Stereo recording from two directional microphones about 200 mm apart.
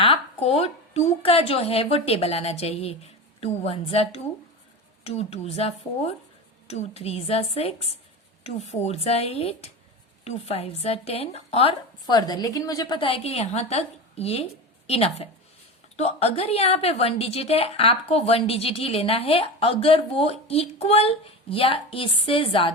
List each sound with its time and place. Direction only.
0.0 s a woman's voice: 30° left (ahead or behind)